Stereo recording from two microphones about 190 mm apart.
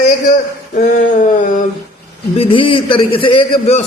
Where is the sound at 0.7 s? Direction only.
45° left (ahead or behind).